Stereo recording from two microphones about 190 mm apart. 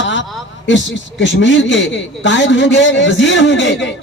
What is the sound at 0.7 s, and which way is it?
A woman's voice, 70° left (ahead or behind).